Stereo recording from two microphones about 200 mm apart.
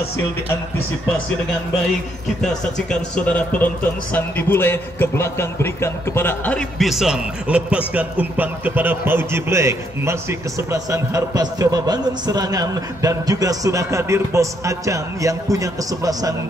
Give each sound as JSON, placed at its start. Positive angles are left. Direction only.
{"t": 2.4, "sound": "speech", "side_deg": 5}